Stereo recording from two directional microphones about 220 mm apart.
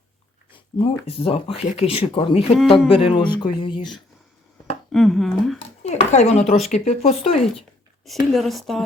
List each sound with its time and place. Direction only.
0.5 s speech: 25° left (ahead or behind)
4.9 s speech: centre (ahead or behind)
5.5 s speech: 30° left (ahead or behind)
8.3 s speech: centre (ahead or behind)